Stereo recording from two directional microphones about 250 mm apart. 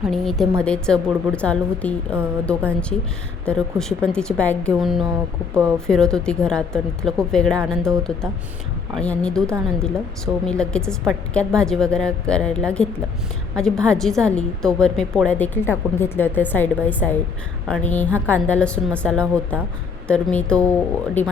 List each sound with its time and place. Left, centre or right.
0.0 s a woman's voice: centre